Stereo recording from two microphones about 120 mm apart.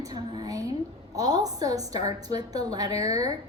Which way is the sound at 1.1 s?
30° right (ahead or behind).